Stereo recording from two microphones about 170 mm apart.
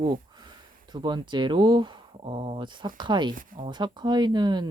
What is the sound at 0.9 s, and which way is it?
Speech, 25° right (ahead or behind).